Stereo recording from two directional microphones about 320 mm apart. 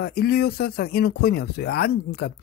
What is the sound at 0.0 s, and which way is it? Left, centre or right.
Speech, left.